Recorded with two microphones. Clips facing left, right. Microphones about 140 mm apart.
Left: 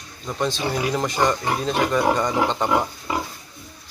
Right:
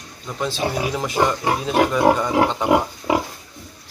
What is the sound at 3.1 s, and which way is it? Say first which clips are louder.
Pig: right 7 dB; 80° right.